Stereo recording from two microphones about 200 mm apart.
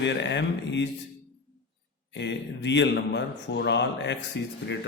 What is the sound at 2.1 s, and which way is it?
A man's voice, 60° left (ahead or behind).